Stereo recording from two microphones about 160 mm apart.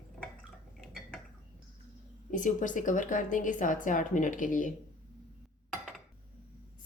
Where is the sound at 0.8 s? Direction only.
Centre (ahead or behind).